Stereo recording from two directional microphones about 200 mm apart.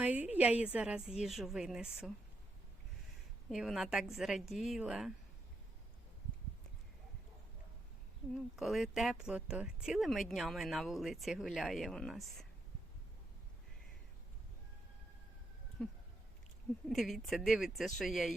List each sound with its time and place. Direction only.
0.0 s a woman's voice: 5° right (ahead or behind)
3.5 s speech: centre (ahead or behind)
8.5 s speech: centre (ahead or behind)
15.8 s a sound: 5° left (ahead or behind)
16.9 s speech: centre (ahead or behind)